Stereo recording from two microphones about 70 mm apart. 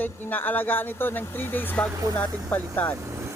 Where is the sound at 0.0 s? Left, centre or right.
Left.